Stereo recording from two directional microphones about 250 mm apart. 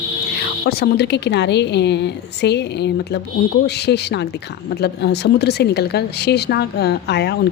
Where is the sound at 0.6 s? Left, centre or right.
Left.